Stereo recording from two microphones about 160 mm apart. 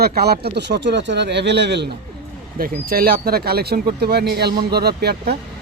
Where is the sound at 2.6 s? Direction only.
65° right (ahead or behind).